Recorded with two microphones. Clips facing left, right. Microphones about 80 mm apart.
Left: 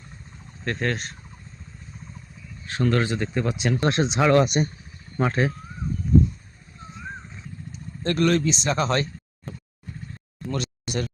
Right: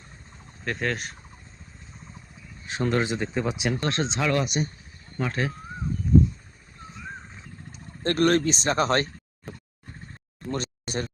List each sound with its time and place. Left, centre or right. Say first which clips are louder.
0.6 s speech: left 2 dB; centre
2.6 s speech: left 2 dB; centre
3.8 s speech: left 5 dB; centre
4.4 s speech: left 6 dB; left
8.0 s speech: even; right
10.5 s a sound: left 1 dB; right